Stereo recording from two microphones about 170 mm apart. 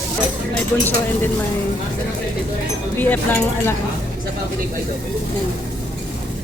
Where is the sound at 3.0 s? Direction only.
10° left (ahead or behind).